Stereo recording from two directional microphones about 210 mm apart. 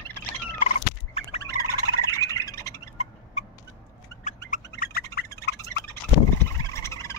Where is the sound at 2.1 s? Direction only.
15° left (ahead or behind).